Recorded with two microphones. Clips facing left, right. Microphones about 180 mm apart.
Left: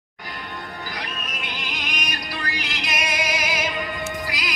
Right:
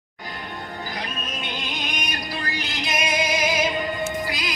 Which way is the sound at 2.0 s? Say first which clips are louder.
Right 1 dB; 25° right (ahead or behind).